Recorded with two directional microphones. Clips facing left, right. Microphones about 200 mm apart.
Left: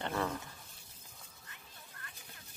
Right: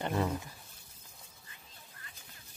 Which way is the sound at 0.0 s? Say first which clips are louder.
Right 3 dB; 15° right (ahead or behind).